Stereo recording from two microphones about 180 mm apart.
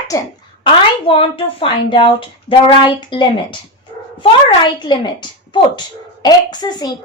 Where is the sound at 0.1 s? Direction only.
25° left (ahead or behind).